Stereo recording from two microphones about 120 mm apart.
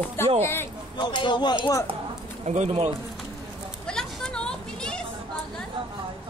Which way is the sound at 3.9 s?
5° left (ahead or behind).